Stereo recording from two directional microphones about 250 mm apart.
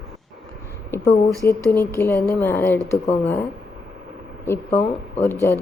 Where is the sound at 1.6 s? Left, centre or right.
Centre.